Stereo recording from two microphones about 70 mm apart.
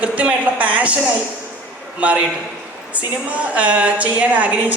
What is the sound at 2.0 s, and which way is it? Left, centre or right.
A woman's voice, centre.